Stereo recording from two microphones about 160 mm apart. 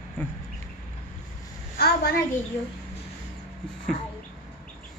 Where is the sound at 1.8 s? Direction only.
80° left.